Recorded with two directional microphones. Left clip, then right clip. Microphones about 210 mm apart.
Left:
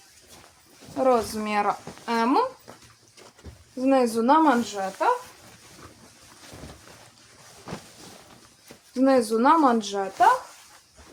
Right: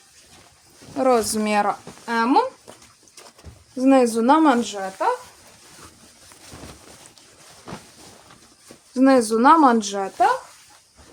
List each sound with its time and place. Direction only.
0.9 s speech: 40° right (ahead or behind)
1.6 s speech: 30° right (ahead or behind)
3.8 s speech: 45° right (ahead or behind)
9.0 s speech: 40° right (ahead or behind)